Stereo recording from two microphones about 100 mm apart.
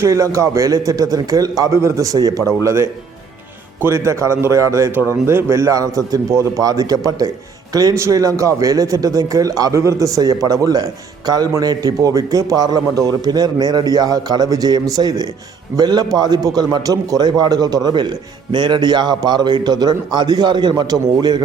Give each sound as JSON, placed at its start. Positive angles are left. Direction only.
{"t": 0.0, "sound": "a man's voice", "side_deg": -30}